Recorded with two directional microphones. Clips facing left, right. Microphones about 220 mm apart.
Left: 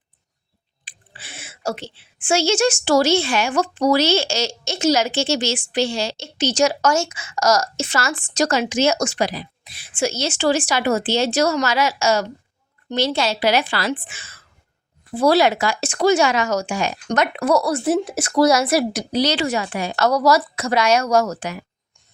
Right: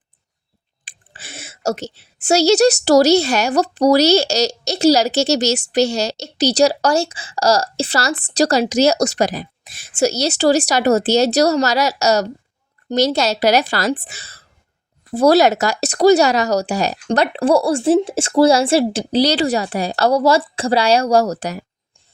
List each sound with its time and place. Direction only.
0.9 s speech: 45° right (ahead or behind)